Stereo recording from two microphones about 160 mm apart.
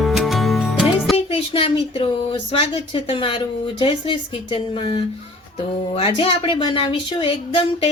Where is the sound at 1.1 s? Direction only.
35° left (ahead or behind).